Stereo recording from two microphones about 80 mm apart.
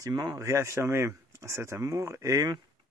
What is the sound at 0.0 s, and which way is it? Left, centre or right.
Speech, right.